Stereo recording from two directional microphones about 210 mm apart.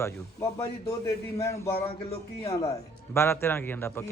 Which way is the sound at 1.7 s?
30° left (ahead or behind).